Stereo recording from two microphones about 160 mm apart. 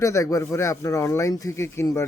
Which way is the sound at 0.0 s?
20° left (ahead or behind).